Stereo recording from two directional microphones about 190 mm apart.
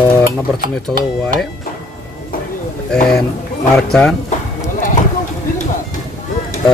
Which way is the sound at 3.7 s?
5° left (ahead or behind).